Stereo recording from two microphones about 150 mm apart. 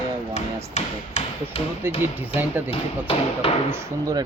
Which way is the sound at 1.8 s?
15° right (ahead or behind).